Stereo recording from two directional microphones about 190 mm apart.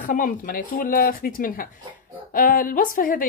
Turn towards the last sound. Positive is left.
turn(degrees=45)  # may be behind; listen again after turning